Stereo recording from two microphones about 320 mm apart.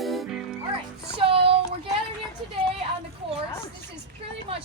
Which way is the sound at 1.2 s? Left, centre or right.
Centre.